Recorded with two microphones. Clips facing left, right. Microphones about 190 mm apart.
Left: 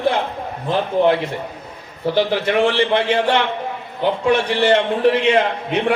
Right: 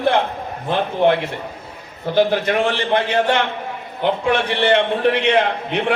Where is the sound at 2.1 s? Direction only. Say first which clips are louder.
Right 2 dB; 45° right (ahead or behind).